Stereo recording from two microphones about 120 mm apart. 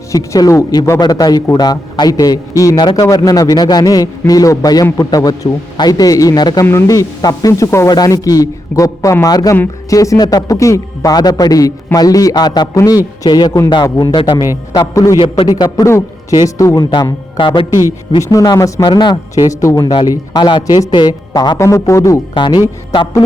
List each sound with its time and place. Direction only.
0.1 s a man's voice: 30° left (ahead or behind)
14.7 s a man's voice: 30° left (ahead or behind)
15.2 s a man's voice: 40° left (ahead or behind)
18.2 s a man's voice: 30° left (ahead or behind)
18.9 s a man's voice: 40° left (ahead or behind)
22.4 s a man's voice: 40° left (ahead or behind)